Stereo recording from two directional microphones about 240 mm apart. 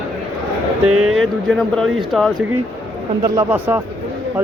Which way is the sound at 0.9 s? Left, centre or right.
Right.